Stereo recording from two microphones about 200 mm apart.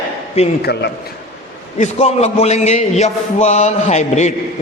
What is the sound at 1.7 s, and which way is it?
A man's voice, 35° left (ahead or behind).